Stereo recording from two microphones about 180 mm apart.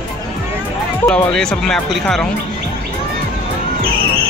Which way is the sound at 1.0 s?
5° left (ahead or behind).